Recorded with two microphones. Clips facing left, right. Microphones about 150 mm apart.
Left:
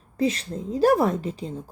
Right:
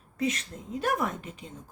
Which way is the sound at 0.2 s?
30° left (ahead or behind).